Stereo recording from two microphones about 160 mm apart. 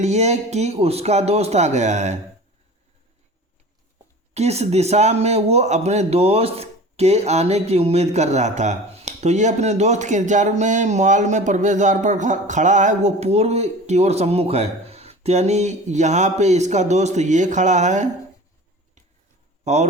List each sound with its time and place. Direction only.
0.0 s speech: 45° right (ahead or behind)
4.4 s speech: 40° right (ahead or behind)
19.6 s speech: 45° right (ahead or behind)